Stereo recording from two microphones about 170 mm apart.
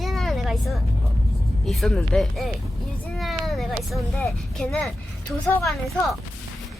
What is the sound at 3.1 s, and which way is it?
Vehicle, centre (ahead or behind).